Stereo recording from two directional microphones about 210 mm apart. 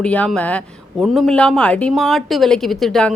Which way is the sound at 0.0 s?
5° left (ahead or behind).